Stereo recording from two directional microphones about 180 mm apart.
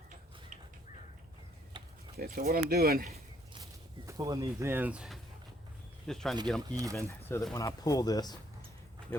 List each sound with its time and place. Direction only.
1.7 s a sound: 25° right (ahead or behind)
2.1 s speech: 55° right (ahead or behind)
4.0 s speech: 20° right (ahead or behind); by 6.3 s centre (ahead or behind)
6.7 s speech: 20° right (ahead or behind)
6.9 s speech: 15° left (ahead or behind)